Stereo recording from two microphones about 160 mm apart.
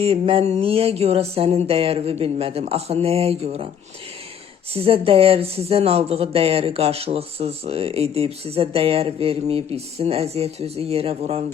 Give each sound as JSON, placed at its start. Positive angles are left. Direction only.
{"t": 0.0, "sound": "speech", "side_deg": -35}
{"t": 4.7, "sound": "speech", "side_deg": -35}